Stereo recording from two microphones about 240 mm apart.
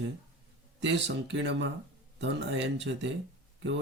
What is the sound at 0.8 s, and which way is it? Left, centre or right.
Speech, right.